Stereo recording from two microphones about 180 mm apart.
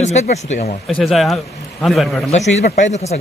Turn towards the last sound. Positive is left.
turn(degrees=40)  # may be behind; listen again after turning